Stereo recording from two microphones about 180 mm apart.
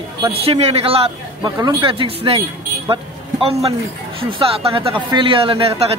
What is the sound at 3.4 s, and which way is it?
A man's voice, 30° right (ahead or behind).